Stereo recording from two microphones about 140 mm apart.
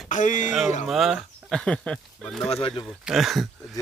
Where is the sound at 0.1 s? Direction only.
65° left (ahead or behind).